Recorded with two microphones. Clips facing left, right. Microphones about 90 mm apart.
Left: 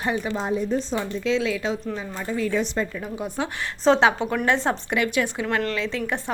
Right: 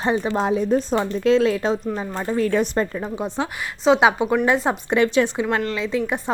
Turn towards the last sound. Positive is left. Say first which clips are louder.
# right 4 dB
turn(degrees=-20)  # may be behind; listen again after turning